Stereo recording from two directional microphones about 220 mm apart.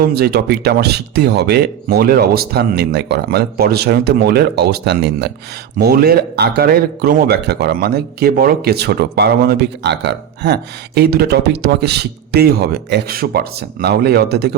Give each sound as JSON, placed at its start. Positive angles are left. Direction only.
{"t": 0.1, "sound": "speech", "side_deg": -45}